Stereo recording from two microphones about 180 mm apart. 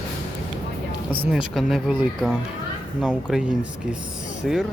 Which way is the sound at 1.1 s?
5° right (ahead or behind).